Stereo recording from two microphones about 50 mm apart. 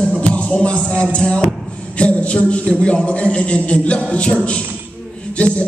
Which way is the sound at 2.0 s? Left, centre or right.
Left.